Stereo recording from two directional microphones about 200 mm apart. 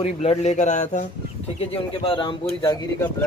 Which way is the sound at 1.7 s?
25° left (ahead or behind).